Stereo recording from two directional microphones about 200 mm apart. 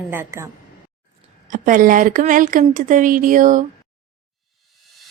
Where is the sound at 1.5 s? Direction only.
40° right (ahead or behind).